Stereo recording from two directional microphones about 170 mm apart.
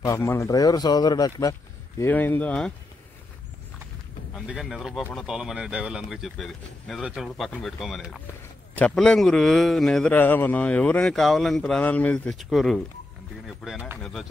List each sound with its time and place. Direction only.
0.0 s a man's voice: 15° left (ahead or behind)
4.3 s a man's voice: 5° right (ahead or behind)